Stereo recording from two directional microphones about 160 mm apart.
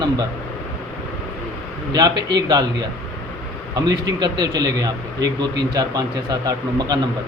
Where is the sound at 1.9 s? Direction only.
25° right (ahead or behind).